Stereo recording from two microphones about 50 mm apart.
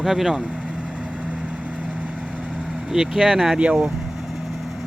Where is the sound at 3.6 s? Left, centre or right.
Right.